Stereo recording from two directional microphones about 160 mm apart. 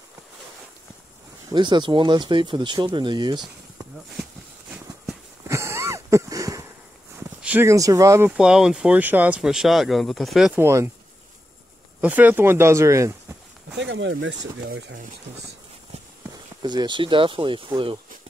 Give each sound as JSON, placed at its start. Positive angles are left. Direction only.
{"t": 1.5, "sound": "speech", "side_deg": -30}
{"t": 5.5, "sound": "a sound", "side_deg": -15}
{"t": 7.2, "sound": "speech", "side_deg": -15}
{"t": 8.3, "sound": "speech", "side_deg": -5}
{"t": 10.6, "sound": "speech", "side_deg": -20}
{"t": 12.0, "sound": "speech", "side_deg": -10}
{"t": 14.4, "sound": "speech", "side_deg": -90}
{"t": 16.6, "sound": "speech", "side_deg": -30}